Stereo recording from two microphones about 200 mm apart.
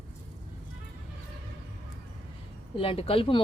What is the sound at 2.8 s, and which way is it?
Speech, 25° left (ahead or behind).